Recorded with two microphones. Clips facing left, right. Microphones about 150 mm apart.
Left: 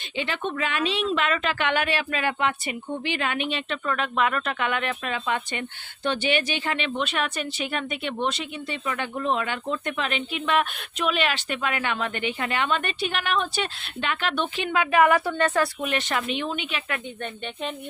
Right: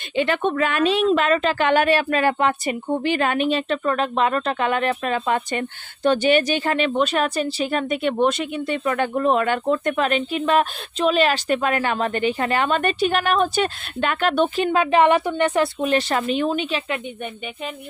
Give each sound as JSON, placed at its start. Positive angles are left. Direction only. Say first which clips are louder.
{"t": 0.2, "sound": "speech", "louder": "right 8 dB", "side_deg": -50}
{"t": 15.8, "sound": "speech", "louder": "right 6 dB", "side_deg": -35}